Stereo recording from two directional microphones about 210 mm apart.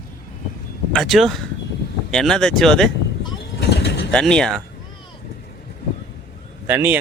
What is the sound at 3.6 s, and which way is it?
Pigeon, 55° left (ahead or behind).